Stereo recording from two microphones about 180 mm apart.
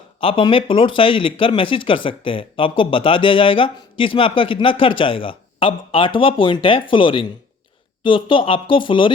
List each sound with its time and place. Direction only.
0.2 s speech: 30° left (ahead or behind)